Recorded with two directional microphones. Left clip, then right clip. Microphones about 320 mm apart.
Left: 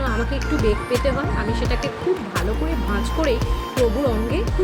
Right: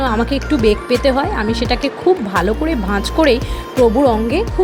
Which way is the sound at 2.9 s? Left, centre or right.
Right.